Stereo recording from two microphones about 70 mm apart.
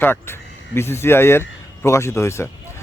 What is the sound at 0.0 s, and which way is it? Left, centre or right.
Speech, left.